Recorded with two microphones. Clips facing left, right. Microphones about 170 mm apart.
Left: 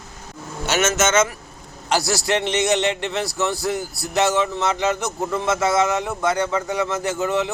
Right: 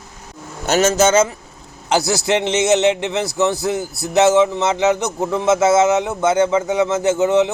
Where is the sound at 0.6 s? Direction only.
35° right (ahead or behind).